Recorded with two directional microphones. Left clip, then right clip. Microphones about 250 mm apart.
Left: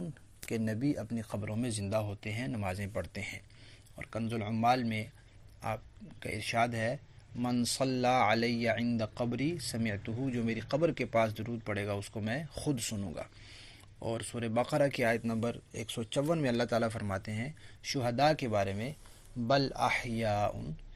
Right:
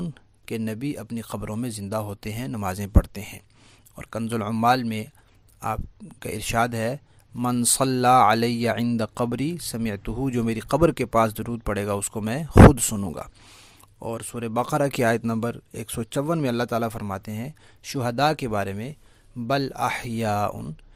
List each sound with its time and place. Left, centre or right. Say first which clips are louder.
0.6 s speech: right 1 dB; right